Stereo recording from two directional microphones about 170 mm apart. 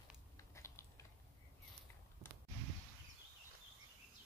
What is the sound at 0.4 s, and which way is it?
Typing, 15° left (ahead or behind).